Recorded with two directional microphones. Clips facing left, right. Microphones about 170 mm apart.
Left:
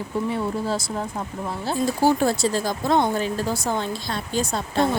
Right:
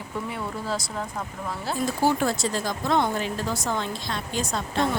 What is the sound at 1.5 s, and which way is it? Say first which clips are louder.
Speech: left 4 dB; 30° left (ahead or behind).